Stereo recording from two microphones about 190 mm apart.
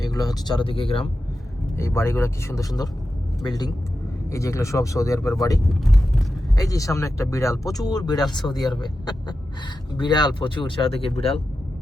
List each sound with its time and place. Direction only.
0.0 s speech: 20° left (ahead or behind)
1.7 s speech: 15° left (ahead or behind)
5.8 s vehicle: centre (ahead or behind)
6.6 s speech: 15° left (ahead or behind)